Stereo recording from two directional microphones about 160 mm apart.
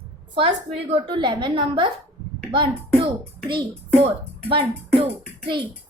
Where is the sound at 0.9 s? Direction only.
30° right (ahead or behind).